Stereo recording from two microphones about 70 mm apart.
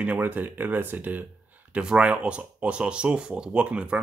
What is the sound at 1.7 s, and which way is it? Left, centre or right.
Speech, centre.